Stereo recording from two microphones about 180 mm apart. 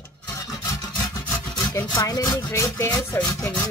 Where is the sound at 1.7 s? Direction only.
15° left (ahead or behind).